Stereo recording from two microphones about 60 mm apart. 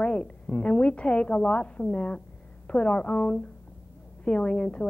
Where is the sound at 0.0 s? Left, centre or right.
Centre.